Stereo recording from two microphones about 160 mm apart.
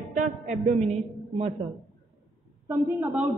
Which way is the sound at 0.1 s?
50° right (ahead or behind).